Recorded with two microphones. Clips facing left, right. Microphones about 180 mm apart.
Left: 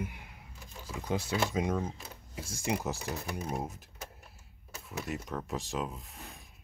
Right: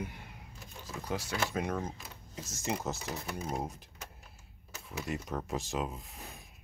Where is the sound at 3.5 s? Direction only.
5° left (ahead or behind).